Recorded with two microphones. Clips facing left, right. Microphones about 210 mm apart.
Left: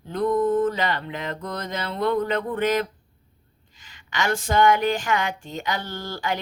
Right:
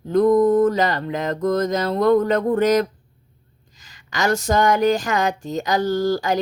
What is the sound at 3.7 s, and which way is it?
Speech, 40° right (ahead or behind).